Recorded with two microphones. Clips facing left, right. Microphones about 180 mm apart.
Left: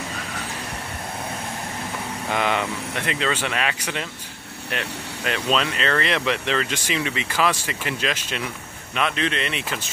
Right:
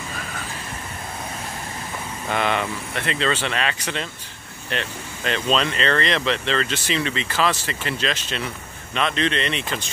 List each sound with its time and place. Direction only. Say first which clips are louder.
2.2 s speech: right 1 dB; 15° left (ahead or behind)